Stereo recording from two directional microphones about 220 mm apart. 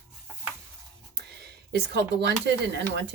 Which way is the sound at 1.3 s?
45° right (ahead or behind).